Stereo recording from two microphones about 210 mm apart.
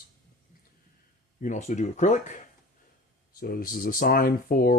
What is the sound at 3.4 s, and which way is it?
Speech, 45° left (ahead or behind).